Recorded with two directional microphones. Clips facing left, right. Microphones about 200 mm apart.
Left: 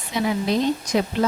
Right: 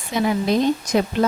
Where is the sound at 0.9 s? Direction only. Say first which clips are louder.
Right 2 dB; 50° right (ahead or behind).